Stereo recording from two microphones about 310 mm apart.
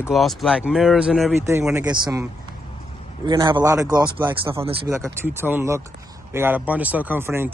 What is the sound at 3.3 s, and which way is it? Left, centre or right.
Speech, centre.